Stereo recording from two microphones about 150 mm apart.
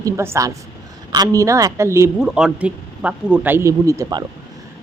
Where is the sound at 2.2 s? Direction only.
5° right (ahead or behind); by 4.3 s 25° right (ahead or behind).